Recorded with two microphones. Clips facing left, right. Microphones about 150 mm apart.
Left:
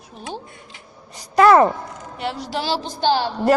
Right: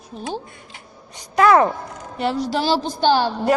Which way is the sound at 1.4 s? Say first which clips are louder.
Left 2 dB; centre (ahead or behind).